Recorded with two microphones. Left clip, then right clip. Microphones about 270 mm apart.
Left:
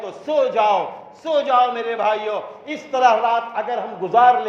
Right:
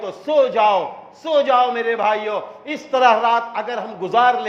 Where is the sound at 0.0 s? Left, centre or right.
Right.